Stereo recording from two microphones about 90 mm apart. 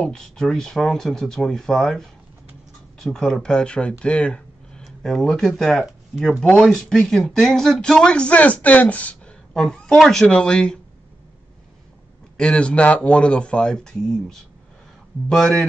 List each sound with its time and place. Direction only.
0.0 s speech: 5° left (ahead or behind)
12.4 s speech: 10° left (ahead or behind)
15.2 s speech: 5° left (ahead or behind)